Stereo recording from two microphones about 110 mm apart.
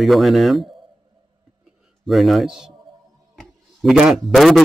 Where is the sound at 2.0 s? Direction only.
Centre (ahead or behind).